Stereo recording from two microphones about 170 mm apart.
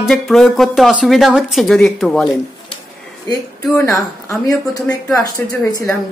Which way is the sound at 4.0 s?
20° left (ahead or behind).